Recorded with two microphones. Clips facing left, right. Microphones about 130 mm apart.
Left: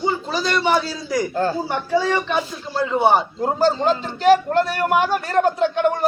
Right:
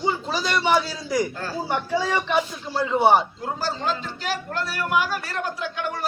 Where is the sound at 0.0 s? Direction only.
10° right (ahead or behind).